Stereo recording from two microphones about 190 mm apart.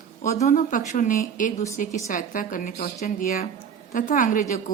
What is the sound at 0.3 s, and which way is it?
A woman's voice, 40° left (ahead or behind).